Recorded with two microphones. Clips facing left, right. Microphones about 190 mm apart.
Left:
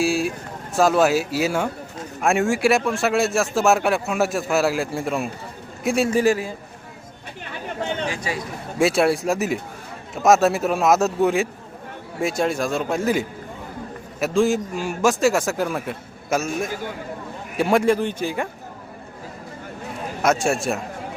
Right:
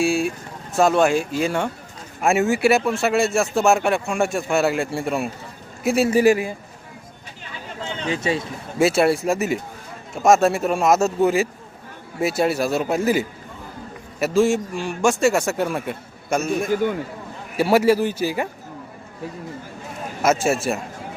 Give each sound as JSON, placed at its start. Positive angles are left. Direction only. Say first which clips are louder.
{"t": 0.0, "sound": "a man's voice", "louder": "right 1 dB", "side_deg": 0}
{"t": 7.4, "sound": "chatter", "louder": "left 5 dB", "side_deg": 55}
{"t": 8.0, "sound": "speech", "louder": "right 4 dB", "side_deg": -25}
{"t": 8.8, "sound": "speech", "louder": "right 1 dB", "side_deg": 0}
{"t": 20.2, "sound": "speech", "louder": "right 1 dB", "side_deg": 0}